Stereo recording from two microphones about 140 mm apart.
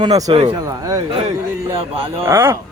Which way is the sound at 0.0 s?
25° right (ahead or behind).